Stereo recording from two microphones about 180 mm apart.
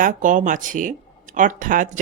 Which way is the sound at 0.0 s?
45° right (ahead or behind).